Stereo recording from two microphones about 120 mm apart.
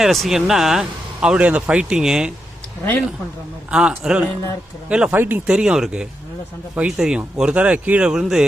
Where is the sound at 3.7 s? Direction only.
5° right (ahead or behind).